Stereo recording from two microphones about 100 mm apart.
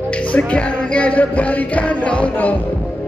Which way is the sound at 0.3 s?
10° left (ahead or behind).